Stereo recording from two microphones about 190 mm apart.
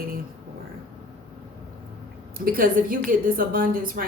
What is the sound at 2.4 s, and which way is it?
Speech, 50° right (ahead or behind).